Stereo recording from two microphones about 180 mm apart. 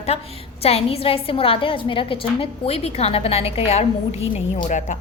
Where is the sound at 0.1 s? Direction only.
35° left (ahead or behind).